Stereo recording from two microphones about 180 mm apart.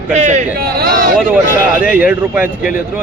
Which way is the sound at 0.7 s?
55° right (ahead or behind).